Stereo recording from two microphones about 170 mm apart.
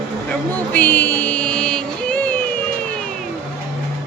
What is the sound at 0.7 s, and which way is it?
Music, 10° left (ahead or behind).